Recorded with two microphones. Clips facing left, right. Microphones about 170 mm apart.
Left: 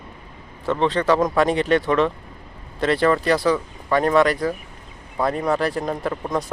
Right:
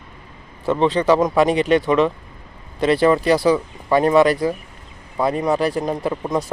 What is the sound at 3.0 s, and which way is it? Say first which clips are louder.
Speech: right 3 dB; 15° right (ahead or behind).